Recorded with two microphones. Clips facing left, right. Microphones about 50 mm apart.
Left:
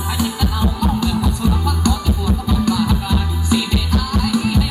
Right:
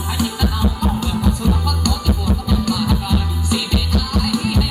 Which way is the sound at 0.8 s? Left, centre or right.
Right.